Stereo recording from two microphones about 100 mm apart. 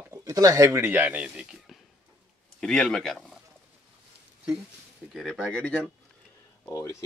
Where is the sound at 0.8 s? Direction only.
15° right (ahead or behind).